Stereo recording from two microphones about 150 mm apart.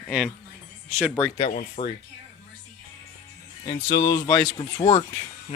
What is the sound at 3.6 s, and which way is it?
Speech, 25° left (ahead or behind).